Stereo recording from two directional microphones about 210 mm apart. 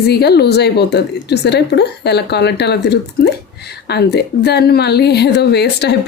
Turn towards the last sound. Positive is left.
turn(degrees=50)  # may be behind; listen again after turning